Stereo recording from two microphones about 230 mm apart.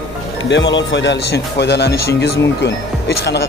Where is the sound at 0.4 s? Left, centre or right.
Left.